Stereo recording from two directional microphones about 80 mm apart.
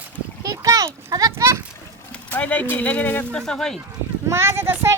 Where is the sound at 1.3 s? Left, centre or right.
Right.